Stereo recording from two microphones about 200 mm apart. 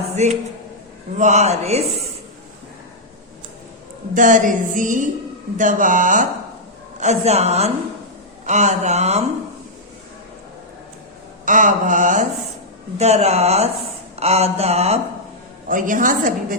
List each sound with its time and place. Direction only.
0.2 s music: 35° right (ahead or behind)
4.1 s music: 40° right (ahead or behind)
11.4 s music: 40° right (ahead or behind)
15.7 s a woman's voice: 40° right (ahead or behind)